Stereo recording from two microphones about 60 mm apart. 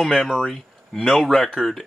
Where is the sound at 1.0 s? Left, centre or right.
Centre.